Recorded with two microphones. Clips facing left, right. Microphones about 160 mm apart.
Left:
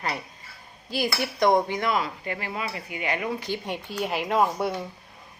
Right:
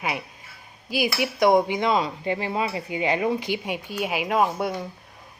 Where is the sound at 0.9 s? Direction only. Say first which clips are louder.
Right 3 dB; 5° right (ahead or behind); by 3.2 s 25° right (ahead or behind).